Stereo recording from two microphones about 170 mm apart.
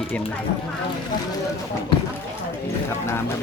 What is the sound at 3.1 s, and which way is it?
Speech, 15° left (ahead or behind).